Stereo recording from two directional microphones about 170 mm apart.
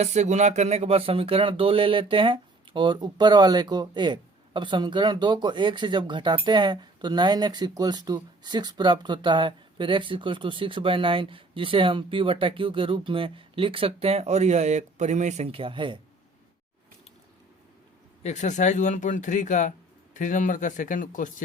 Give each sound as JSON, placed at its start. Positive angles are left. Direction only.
{"t": 0.0, "sound": "speech", "side_deg": -40}
{"t": 18.2, "sound": "speech", "side_deg": 45}